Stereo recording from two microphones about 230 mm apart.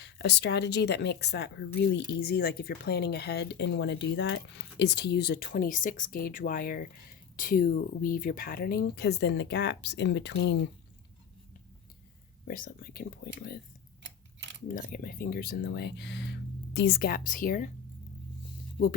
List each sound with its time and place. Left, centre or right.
0.0 s speech: left
12.5 s speech: left
14.0 s a sound: right
14.7 s speech: left